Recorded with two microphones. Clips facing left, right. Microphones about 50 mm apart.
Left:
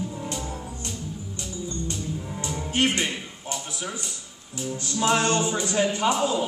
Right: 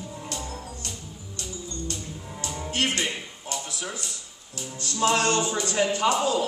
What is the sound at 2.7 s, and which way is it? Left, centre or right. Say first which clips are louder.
Speech: left 3 dB; left.